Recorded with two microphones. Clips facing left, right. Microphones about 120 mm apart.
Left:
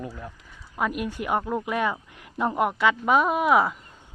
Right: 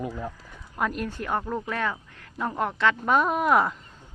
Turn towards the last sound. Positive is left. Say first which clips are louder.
# left 1 dB
turn(degrees=5)  # may be behind; listen again after turning